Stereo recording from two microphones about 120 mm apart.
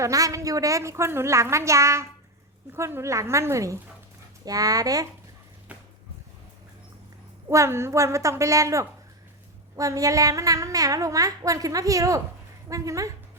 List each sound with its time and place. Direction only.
0.0 s a child's voice: 30° right (ahead or behind)
7.4 s a child's voice: 25° right (ahead or behind)